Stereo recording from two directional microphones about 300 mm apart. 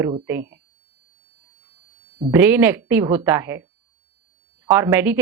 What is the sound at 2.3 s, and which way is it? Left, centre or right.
Speech, centre.